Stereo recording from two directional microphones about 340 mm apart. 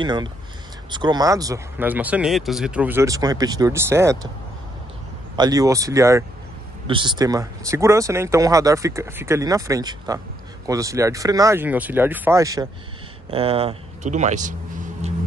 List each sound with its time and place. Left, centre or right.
0.0 s speech: centre
5.3 s speech: centre